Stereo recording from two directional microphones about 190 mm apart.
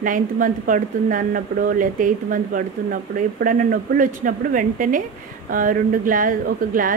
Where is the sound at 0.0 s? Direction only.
45° right (ahead or behind).